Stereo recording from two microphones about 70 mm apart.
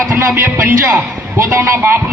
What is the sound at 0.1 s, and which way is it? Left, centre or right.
Speech, right.